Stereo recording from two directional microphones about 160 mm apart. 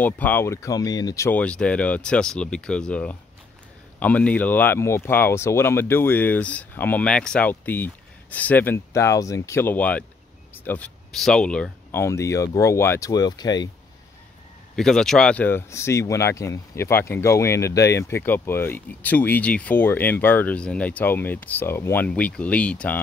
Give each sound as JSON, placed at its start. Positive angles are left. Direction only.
{"t": 0.0, "sound": "speech", "side_deg": 10}
{"t": 1.4, "sound": "speech", "side_deg": 5}
{"t": 14.8, "sound": "speech", "side_deg": 5}